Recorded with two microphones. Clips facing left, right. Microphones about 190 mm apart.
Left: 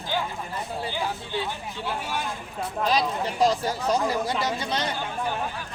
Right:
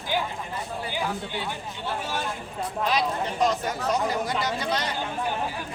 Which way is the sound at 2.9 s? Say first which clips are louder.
Left 1 dB; 35° left (ahead or behind).